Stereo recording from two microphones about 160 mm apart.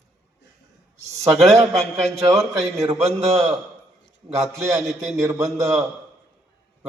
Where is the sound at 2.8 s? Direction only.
40° right (ahead or behind).